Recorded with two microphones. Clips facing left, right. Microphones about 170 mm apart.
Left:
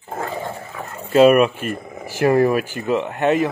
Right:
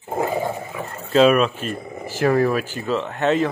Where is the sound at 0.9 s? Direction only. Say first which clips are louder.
Left 3 dB; 10° left (ahead or behind).